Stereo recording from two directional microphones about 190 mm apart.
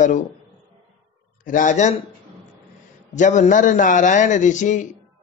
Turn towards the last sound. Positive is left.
turn(degrees=40)  # may be behind; listen again after turning